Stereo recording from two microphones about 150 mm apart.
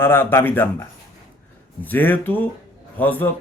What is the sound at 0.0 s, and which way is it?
A man's voice, 15° left (ahead or behind).